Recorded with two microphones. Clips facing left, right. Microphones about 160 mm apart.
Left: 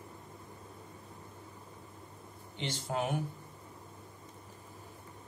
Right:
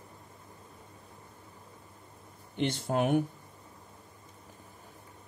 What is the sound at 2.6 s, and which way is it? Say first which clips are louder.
Speech: right 6 dB; 60° right (ahead or behind).